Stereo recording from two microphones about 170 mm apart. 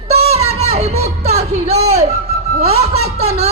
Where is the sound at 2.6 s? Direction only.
40° right (ahead or behind).